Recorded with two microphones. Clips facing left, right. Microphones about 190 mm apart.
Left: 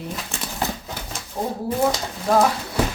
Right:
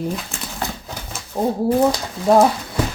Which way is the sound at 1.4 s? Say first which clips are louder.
Right 6 dB; 30° right (ahead or behind).